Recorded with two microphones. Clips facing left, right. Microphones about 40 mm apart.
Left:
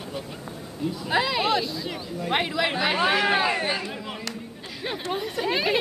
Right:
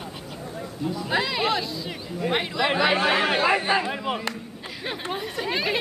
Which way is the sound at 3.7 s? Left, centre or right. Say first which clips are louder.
Right 7 dB; right.